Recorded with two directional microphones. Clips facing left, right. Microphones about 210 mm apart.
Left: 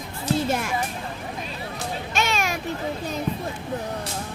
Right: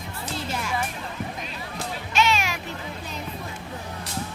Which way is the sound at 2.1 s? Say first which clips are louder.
Right 2 dB; 45° left (ahead or behind).